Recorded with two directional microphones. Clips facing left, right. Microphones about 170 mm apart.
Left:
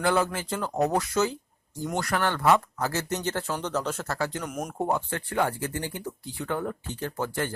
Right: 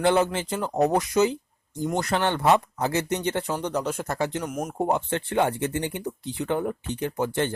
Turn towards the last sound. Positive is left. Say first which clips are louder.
# right 4 dB
turn(degrees=-20)  # may be behind; listen again after turning